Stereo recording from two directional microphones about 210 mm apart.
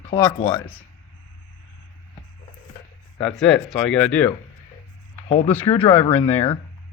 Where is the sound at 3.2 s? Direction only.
Centre (ahead or behind).